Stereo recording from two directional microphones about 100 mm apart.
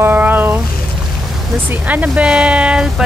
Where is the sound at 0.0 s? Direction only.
20° right (ahead or behind).